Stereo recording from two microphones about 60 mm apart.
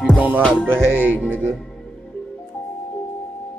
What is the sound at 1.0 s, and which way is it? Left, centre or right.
Music, right.